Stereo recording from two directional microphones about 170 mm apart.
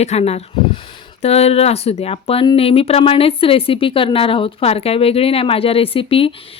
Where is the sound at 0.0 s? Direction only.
40° left (ahead or behind).